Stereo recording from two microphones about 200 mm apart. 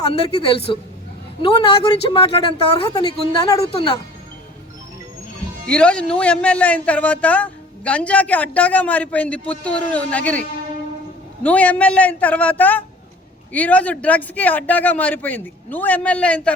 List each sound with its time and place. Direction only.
0.1 s speech: 30° left (ahead or behind)
2.0 s speech: 25° left (ahead or behind)
5.6 s speech: 5° left (ahead or behind)
11.4 s speech: 5° left (ahead or behind)